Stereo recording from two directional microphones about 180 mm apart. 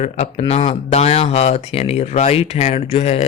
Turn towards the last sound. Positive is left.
turn(degrees=35)  # may be behind; listen again after turning